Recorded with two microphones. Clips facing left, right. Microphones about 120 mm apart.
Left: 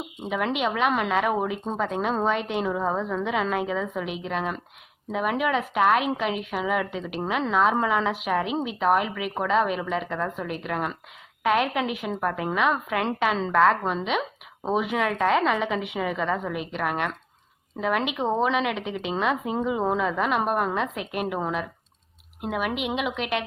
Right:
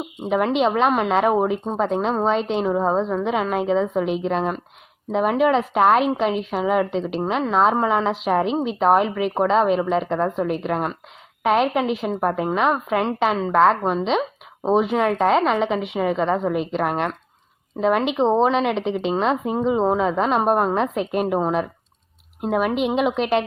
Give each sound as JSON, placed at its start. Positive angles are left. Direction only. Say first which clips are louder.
{"t": 0.4, "sound": "a woman's voice", "louder": "right 5 dB", "side_deg": -30}